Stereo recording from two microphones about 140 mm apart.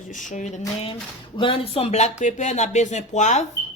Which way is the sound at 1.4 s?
40° left (ahead or behind).